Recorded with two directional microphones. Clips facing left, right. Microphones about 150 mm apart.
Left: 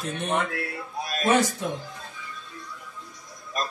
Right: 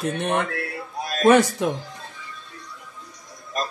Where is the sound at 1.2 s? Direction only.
60° right (ahead or behind).